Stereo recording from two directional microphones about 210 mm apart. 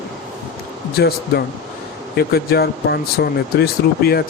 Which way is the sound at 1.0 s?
50° left (ahead or behind).